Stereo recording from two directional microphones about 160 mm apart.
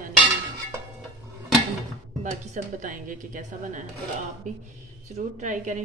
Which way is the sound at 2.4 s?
50° right (ahead or behind).